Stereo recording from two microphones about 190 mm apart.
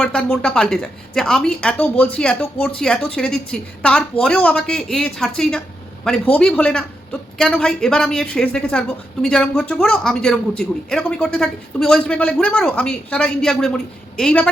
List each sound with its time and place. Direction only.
0.0 s speech: 5° left (ahead or behind)